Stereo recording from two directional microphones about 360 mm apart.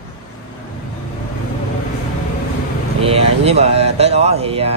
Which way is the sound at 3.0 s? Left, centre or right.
Centre.